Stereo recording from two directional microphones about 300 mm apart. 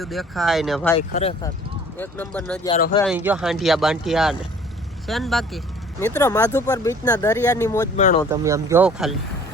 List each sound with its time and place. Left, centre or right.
0.0 s speech: centre
0.9 s speech: centre
2.0 s speech: centre
2.6 s speech: centre
3.0 s speech: centre
7.9 s speech: left
8.3 s speech: centre